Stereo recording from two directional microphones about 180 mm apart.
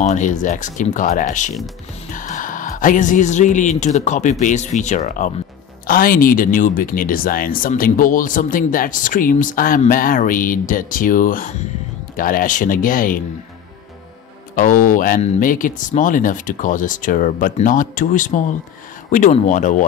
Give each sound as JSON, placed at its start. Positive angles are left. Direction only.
{"t": 0.0, "sound": "speech", "side_deg": 45}
{"t": 14.5, "sound": "speech", "side_deg": 50}